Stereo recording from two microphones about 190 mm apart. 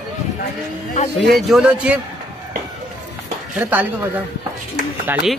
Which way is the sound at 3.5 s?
10° right (ahead or behind).